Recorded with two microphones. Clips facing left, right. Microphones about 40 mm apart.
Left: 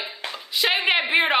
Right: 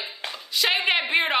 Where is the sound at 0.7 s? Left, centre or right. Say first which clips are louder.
Left 2 dB; centre.